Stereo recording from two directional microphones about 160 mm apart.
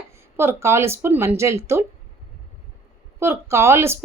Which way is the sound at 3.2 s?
15° right (ahead or behind).